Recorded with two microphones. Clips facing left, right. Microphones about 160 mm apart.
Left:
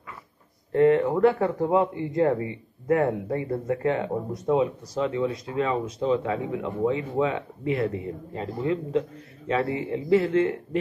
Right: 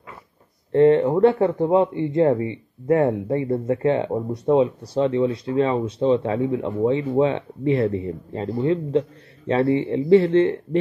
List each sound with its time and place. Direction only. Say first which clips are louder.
0.7 s speech: right 4 dB; 25° right (ahead or behind)